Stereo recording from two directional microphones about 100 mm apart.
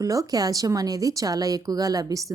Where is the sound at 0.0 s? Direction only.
35° right (ahead or behind).